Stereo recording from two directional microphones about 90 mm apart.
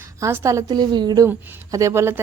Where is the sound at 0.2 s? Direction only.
35° right (ahead or behind).